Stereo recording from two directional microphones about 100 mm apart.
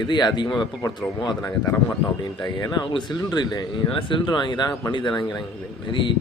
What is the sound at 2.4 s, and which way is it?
A man's voice, 45° left (ahead or behind).